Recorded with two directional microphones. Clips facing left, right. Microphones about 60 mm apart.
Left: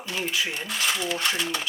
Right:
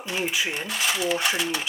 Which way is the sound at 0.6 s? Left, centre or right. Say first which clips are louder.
Right 2 dB; centre.